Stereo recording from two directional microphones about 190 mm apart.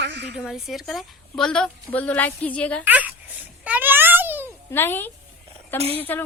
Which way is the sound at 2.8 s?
10° right (ahead or behind).